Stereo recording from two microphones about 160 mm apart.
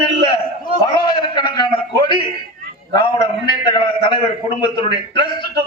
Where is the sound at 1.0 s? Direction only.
25° left (ahead or behind).